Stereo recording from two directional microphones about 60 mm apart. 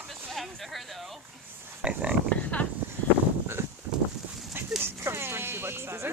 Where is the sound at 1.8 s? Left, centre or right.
Centre.